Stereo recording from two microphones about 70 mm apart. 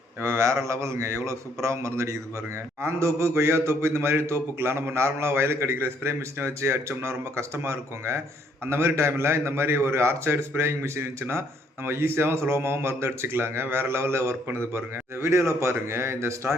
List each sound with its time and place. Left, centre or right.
0.2 s a man's voice: right